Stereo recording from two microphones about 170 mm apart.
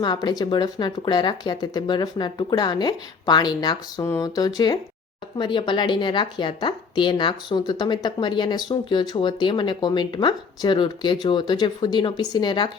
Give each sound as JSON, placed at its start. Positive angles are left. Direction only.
{"t": 0.0, "sound": "a woman's voice", "side_deg": 25}